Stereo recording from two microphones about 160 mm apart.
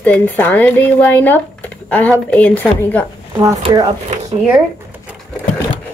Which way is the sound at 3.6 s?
25° right (ahead or behind).